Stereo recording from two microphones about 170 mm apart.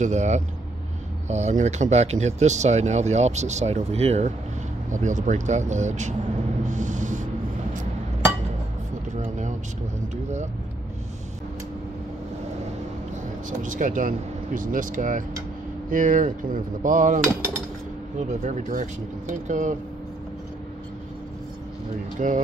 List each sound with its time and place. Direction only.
0.0 s speech: 45° right (ahead or behind)
6.6 s a sound: 45° right (ahead or behind)
9.1 s vehicle: 45° right (ahead or behind)
13.5 s speech: 50° right (ahead or behind)
18.4 s speech: 45° right (ahead or behind)
22.2 s speech: 45° right (ahead or behind)